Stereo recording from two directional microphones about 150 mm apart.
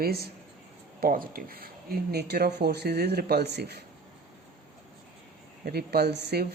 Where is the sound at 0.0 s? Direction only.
90° right.